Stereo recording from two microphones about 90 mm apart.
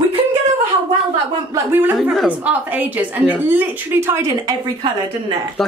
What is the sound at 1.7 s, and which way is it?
A woman's voice, 25° right (ahead or behind).